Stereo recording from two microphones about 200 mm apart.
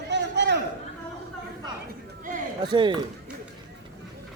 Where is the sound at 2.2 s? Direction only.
40° right (ahead or behind).